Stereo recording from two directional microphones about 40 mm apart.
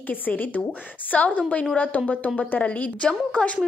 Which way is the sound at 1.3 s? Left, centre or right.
Left.